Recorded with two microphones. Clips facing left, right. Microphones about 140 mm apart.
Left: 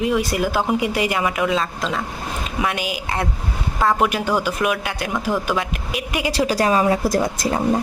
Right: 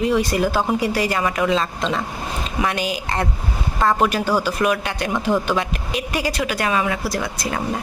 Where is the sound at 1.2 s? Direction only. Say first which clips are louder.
Right 1 dB; 5° left (ahead or behind).